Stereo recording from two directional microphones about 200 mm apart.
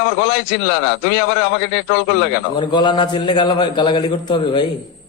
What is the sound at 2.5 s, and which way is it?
A man's voice, 25° left (ahead or behind).